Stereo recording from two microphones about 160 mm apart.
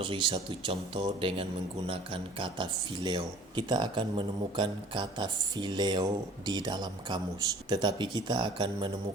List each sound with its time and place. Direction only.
0.0 s speech: 30° right (ahead or behind)